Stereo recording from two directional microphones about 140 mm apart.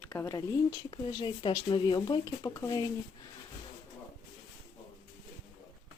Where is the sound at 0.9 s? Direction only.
35° left (ahead or behind).